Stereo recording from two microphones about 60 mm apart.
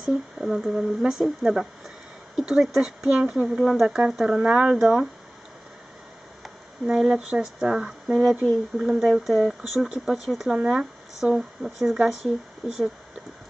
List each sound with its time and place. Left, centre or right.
0.0 s speech: centre
3.2 s speech: right
3.4 s speech: centre
4.5 s speech: right
4.7 s speech: centre
6.9 s speech: centre
10.5 s speech: centre